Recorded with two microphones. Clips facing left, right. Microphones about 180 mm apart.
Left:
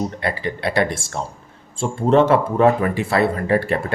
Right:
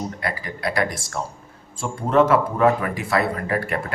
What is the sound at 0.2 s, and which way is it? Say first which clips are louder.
Speech: left 4 dB; 25° left (ahead or behind).